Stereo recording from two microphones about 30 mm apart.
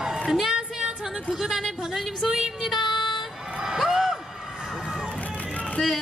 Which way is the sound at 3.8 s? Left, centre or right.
Centre.